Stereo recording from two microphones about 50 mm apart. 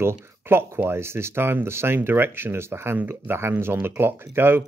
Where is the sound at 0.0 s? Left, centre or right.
Right.